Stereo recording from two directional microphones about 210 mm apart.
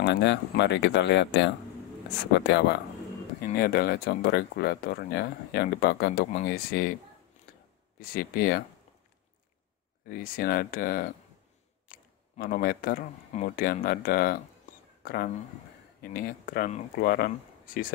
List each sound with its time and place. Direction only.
0.0 s speech: 55° left (ahead or behind)
3.4 s speech: 45° left (ahead or behind)
8.0 s speech: 45° left (ahead or behind)
10.0 s speech: 45° left (ahead or behind)